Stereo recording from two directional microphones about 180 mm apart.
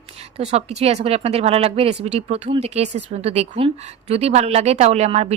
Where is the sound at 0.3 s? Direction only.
35° right (ahead or behind).